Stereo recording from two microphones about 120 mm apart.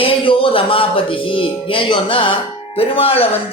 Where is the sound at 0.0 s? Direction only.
50° left (ahead or behind).